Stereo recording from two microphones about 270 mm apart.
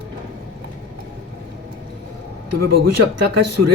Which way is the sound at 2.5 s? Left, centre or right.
Right.